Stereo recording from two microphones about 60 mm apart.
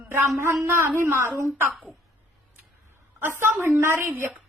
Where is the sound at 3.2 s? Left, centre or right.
Right.